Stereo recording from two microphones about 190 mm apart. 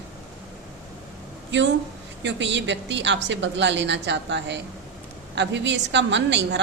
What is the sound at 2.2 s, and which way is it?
A woman's voice, 70° right (ahead or behind).